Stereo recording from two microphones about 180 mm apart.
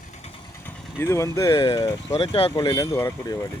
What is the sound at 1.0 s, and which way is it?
Speech, 15° left (ahead or behind).